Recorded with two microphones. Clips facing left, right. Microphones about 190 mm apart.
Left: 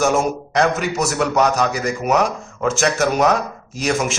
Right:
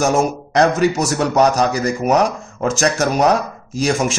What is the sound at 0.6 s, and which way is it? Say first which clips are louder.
A man's voice: right 4 dB; 35° right (ahead or behind).